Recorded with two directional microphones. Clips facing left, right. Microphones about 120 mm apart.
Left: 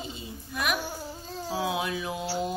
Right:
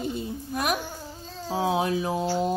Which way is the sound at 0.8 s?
5° left (ahead or behind).